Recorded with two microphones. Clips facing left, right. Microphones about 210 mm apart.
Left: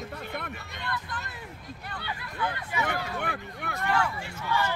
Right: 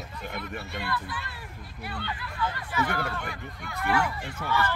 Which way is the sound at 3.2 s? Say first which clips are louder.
Left 3 dB; 60° left (ahead or behind).